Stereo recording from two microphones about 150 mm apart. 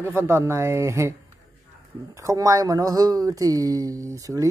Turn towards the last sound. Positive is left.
turn(degrees=-20)  # may be behind; listen again after turning